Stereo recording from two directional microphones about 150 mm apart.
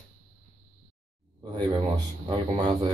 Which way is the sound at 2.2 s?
35° right (ahead or behind).